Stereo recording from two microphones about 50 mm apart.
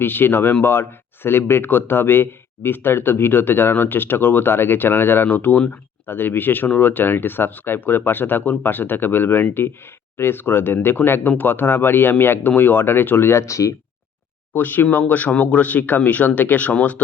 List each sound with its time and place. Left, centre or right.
0.0 s a man's voice: left
14.5 s speech: left